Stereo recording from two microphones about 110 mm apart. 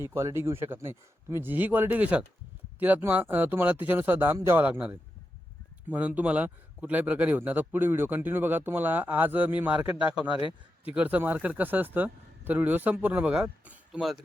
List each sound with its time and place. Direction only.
0.0 s a man's voice: 25° right (ahead or behind); by 14.2 s 5° right (ahead or behind)